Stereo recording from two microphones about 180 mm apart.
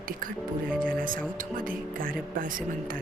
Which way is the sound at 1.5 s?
50° right (ahead or behind).